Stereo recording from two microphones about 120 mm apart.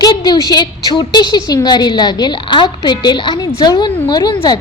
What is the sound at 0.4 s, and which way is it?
A woman's voice, 35° left (ahead or behind).